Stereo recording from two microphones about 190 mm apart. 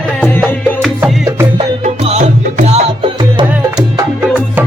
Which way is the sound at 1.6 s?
30° right (ahead or behind).